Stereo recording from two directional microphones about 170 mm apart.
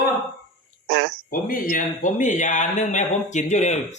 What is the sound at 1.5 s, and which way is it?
Speech, 55° left (ahead or behind).